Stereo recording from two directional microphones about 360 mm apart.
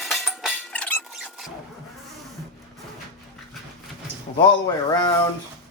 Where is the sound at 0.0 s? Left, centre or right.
Centre.